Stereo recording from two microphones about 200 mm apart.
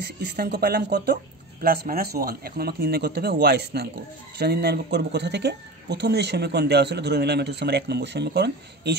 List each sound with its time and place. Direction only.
0.0 s a man's voice: 55° right (ahead or behind)